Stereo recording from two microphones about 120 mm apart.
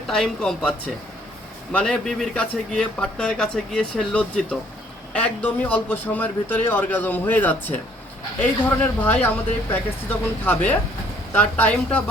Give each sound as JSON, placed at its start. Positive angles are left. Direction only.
{"t": 0.1, "sound": "speech", "side_deg": 5}